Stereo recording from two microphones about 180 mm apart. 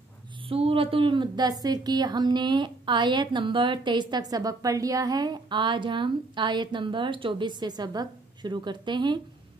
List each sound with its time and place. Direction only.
0.5 s a woman's voice: 30° right (ahead or behind)